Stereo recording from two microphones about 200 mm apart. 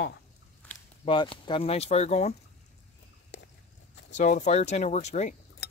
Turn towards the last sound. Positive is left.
turn(degrees=35)  # may be behind; listen again after turning